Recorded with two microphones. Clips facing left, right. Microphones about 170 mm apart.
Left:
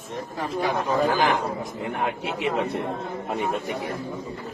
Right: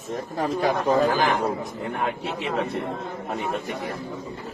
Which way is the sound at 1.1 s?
20° left (ahead or behind).